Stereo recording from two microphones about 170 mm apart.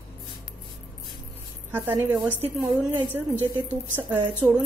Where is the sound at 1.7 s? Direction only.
10° right (ahead or behind).